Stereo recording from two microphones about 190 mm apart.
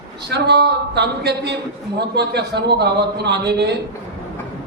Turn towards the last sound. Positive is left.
turn(degrees=-60)  # may be behind; listen again after turning